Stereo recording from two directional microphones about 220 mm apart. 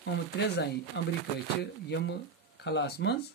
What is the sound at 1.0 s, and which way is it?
Speech, 55° left (ahead or behind).